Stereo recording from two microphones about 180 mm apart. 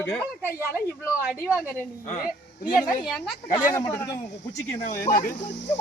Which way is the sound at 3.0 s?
Centre (ahead or behind).